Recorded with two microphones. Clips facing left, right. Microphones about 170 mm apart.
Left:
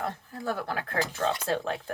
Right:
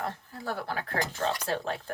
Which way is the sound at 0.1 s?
50° left (ahead or behind).